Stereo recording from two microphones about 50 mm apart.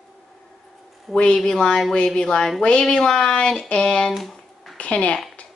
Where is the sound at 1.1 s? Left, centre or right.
Centre.